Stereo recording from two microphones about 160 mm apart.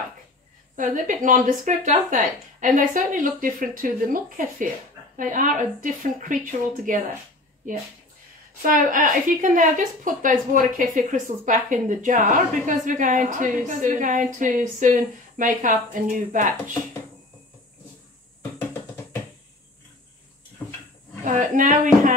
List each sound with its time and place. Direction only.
0.7 s a woman's voice: 55° right (ahead or behind)
8.6 s a woman's voice: 60° right (ahead or behind)
20.6 s drawer open or close: 10° left (ahead or behind)
21.2 s a woman's voice: 50° right (ahead or behind)